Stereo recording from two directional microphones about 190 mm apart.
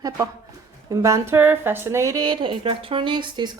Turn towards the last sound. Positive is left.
turn(degrees=-25)  # may be behind; listen again after turning